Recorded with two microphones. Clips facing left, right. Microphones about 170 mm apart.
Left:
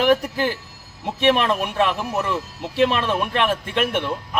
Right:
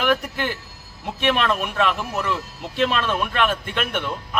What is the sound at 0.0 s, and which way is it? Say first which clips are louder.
Speech: left 4 dB; 30° left (ahead or behind).